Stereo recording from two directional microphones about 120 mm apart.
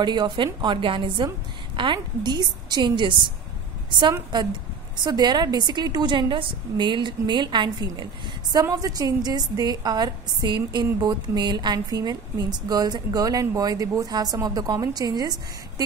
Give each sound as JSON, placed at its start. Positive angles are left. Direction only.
{"t": 0.0, "sound": "a woman's voice", "side_deg": -40}